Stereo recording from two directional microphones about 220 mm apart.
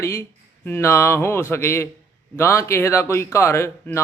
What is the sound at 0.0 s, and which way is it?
Speech, 10° left (ahead or behind).